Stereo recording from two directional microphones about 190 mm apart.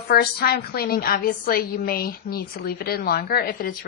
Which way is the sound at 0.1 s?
55° left (ahead or behind).